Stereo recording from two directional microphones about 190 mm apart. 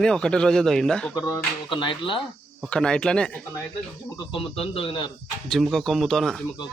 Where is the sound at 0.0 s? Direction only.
5° left (ahead or behind).